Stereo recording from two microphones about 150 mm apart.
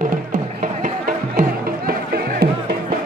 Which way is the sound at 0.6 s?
65° right (ahead or behind).